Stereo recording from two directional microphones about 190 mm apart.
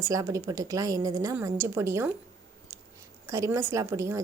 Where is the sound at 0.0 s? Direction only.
15° right (ahead or behind).